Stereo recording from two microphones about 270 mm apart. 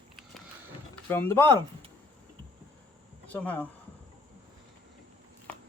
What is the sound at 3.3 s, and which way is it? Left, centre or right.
Speech, centre.